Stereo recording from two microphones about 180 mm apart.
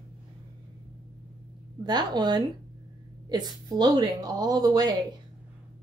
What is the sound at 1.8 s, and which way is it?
A woman's voice, 25° right (ahead or behind).